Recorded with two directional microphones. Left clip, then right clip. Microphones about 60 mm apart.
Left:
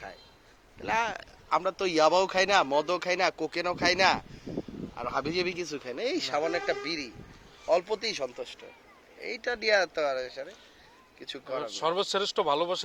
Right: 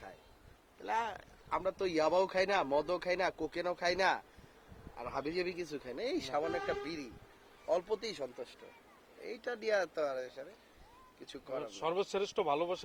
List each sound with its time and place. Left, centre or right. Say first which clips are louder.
0.9 s speech: left 7 dB; centre
5.2 s speech: left 7 dB; centre
6.7 s a man's voice: left 8 dB; centre
7.7 s speech: left 8 dB; centre
11.7 s speech: left 7 dB; right